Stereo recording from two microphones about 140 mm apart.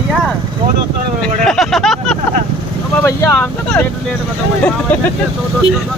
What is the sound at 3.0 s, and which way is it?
Speech, 15° left (ahead or behind).